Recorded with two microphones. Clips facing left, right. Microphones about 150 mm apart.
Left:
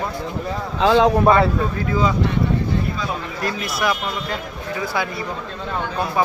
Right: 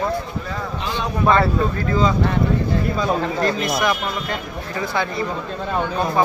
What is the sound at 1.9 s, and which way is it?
Speech, 10° left (ahead or behind).